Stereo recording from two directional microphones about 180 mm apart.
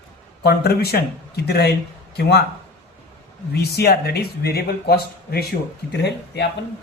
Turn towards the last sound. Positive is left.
turn(degrees=70)  # may be behind; listen again after turning